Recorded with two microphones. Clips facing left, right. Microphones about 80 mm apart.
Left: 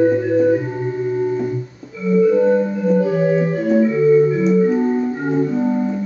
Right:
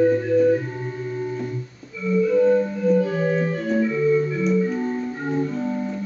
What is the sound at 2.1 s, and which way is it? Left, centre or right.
Organ, left.